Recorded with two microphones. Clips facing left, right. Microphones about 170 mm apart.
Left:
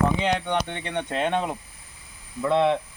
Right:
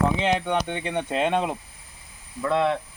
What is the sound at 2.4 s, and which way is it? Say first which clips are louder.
Speech: left 2 dB; 20° left (ahead or behind).